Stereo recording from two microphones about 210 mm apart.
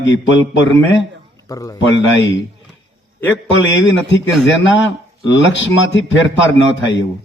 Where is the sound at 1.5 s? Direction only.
15° left (ahead or behind).